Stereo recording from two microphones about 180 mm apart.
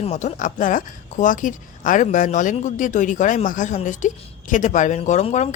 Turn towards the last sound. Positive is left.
turn(degrees=40)  # may be behind; listen again after turning